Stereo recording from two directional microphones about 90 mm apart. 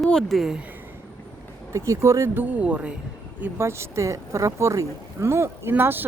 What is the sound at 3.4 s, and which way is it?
Speech, 30° right (ahead or behind).